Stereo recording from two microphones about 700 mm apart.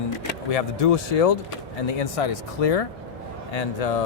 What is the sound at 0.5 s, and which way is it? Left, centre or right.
Speech, left.